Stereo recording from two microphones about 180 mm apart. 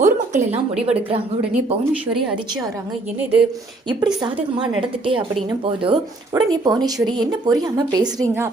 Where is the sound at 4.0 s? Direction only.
20° right (ahead or behind).